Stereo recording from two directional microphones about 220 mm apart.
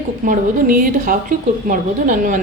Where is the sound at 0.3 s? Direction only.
40° right (ahead or behind).